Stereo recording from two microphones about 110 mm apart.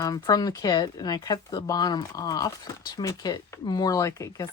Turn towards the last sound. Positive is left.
turn(degrees=30)  # may be behind; listen again after turning